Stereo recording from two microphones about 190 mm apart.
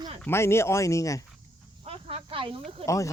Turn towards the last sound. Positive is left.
turn(degrees=15)  # may be behind; listen again after turning